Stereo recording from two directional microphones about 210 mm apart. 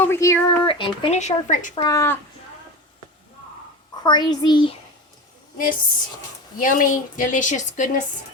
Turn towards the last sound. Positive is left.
turn(degrees=35)  # may be behind; listen again after turning